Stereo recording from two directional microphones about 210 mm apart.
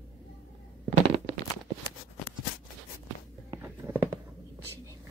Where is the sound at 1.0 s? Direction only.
25° right (ahead or behind).